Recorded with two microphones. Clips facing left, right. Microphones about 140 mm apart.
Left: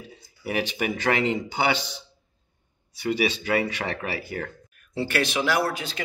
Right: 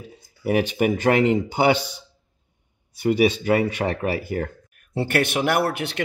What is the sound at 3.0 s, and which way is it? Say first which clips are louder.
A man's voice: right 6 dB; 50° right (ahead or behind).